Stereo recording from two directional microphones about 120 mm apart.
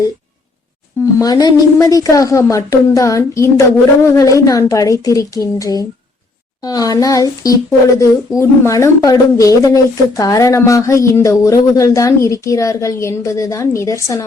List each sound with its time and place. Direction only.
1.2 s speech: 35° left (ahead or behind)